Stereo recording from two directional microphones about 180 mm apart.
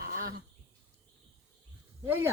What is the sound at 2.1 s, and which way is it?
Speech, 10° right (ahead or behind).